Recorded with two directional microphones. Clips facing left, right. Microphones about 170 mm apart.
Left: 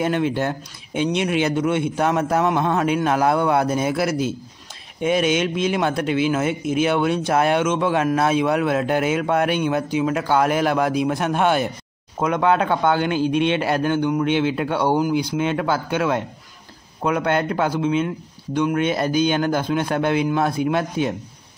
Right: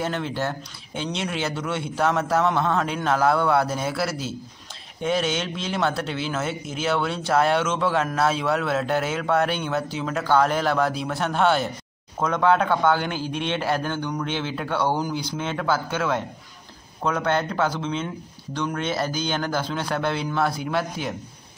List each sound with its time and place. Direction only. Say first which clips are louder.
0.0 s speech: left 6 dB; 15° left (ahead or behind)